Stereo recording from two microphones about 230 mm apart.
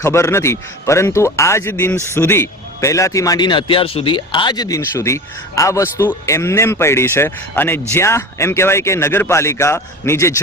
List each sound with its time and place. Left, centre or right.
0.0 s a man's voice: centre